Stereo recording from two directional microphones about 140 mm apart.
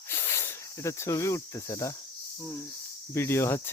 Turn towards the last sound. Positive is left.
turn(degrees=20)  # may be behind; listen again after turning